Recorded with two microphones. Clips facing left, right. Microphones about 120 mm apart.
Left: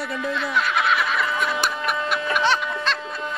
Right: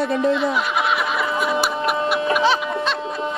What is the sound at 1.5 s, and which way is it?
Printer, 5° right (ahead or behind).